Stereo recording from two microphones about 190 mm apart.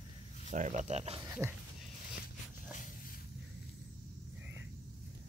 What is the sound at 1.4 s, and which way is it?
Speech, 15° right (ahead or behind).